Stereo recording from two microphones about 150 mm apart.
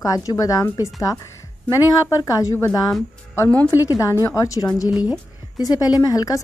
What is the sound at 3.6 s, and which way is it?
Speech, 20° left (ahead or behind).